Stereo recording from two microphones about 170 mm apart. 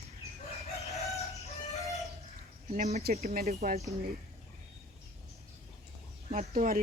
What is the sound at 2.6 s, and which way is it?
A woman's voice, 40° right (ahead or behind).